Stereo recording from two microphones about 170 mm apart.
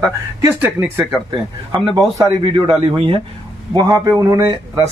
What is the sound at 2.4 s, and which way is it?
Speech, 30° right (ahead or behind).